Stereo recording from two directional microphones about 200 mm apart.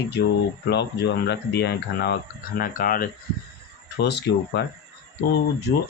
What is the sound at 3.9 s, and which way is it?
Speech, 55° left (ahead or behind).